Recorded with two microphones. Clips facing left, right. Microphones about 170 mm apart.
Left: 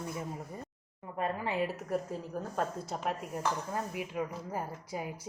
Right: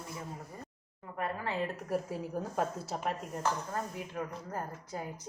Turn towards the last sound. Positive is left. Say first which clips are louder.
# left 2 dB
turn(degrees=10)  # may be behind; listen again after turning